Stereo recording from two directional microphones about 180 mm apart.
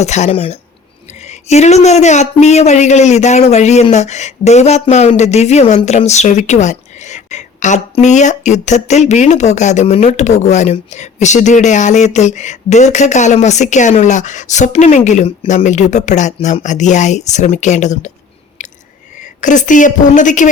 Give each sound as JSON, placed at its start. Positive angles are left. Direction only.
{"t": 0.0, "sound": "speech", "side_deg": 40}
{"t": 19.2, "sound": "a woman's voice", "side_deg": 45}